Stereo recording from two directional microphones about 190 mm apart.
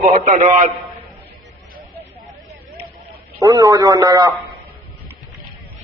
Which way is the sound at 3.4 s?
20° right (ahead or behind).